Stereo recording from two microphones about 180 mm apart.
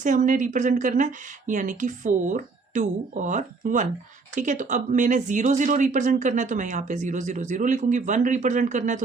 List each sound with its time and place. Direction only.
0.0 s speech: 45° right (ahead or behind)